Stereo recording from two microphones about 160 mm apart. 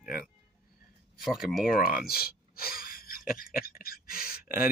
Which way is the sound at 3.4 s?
65° left (ahead or behind).